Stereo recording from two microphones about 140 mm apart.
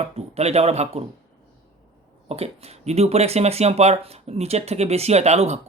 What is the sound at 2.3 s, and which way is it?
Speech, 45° right (ahead or behind).